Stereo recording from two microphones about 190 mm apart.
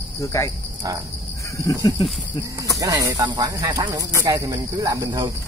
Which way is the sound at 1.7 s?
20° left (ahead or behind).